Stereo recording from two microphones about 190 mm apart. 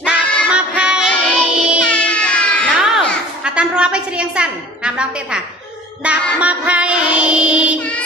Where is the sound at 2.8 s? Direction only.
5° right (ahead or behind).